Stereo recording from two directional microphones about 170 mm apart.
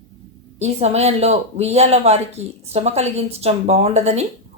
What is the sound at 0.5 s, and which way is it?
Speech, 40° right (ahead or behind).